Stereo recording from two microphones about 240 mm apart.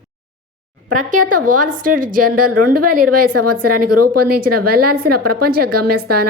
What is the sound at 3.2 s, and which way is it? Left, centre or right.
Speech, right.